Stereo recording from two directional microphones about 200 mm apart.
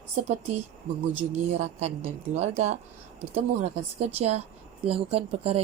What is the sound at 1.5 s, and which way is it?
Speech, 30° right (ahead or behind).